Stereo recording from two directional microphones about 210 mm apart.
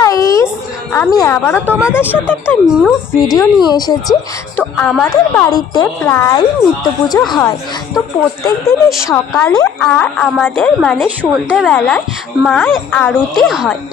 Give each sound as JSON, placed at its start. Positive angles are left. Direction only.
{"t": 0.0, "sound": "a sound", "side_deg": 15}
{"t": 0.9, "sound": "a woman's voice", "side_deg": 15}
{"t": 4.7, "sound": "a woman's voice", "side_deg": 5}
{"t": 9.3, "sound": "a woman's voice", "side_deg": 5}